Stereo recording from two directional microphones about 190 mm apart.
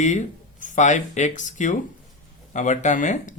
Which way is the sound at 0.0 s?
40° left (ahead or behind).